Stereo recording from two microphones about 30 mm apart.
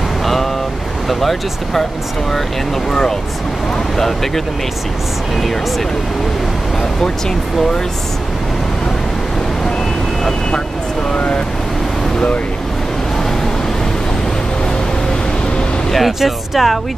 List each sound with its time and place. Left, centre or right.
0.2 s vehicle: centre
1.0 s speech: centre
2.9 s speech: centre
11.1 s speech: left
16.1 s speech: centre